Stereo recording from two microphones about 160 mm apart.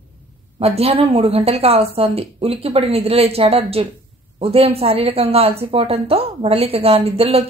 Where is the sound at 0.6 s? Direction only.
40° right (ahead or behind).